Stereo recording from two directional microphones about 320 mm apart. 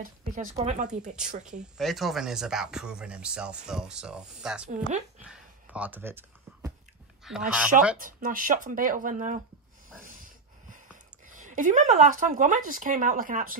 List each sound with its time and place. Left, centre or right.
0.0 s speech: right
1.8 s speech: centre
4.6 s speech: right
5.2 s a sound: centre
7.2 s speech: centre
8.0 s speech: right
10.0 s snort: right
11.2 s speech: right